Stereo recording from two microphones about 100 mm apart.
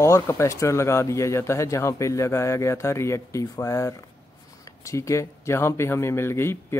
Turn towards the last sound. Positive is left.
turn(degrees=25)  # may be behind; listen again after turning